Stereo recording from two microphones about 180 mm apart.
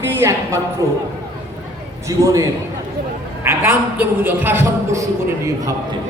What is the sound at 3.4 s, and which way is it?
A man's voice, 15° right (ahead or behind).